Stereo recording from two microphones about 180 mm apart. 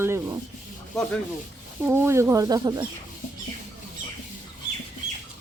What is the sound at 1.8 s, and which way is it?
Speech, 10° right (ahead or behind).